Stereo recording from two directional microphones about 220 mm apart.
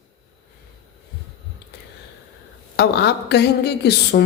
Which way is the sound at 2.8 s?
50° left (ahead or behind).